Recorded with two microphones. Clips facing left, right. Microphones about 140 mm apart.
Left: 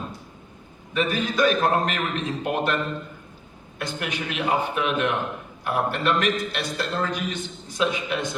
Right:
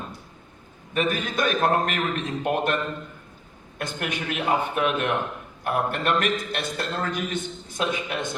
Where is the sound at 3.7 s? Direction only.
50° right (ahead or behind).